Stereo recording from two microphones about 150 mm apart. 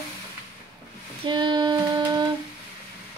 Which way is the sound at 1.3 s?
30° right (ahead or behind).